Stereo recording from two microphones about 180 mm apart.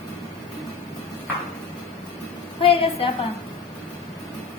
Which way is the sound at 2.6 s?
30° left (ahead or behind).